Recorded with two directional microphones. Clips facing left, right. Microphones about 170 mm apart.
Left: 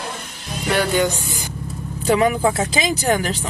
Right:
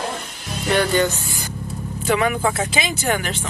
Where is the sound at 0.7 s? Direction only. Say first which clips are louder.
Even; 10° left (ahead or behind).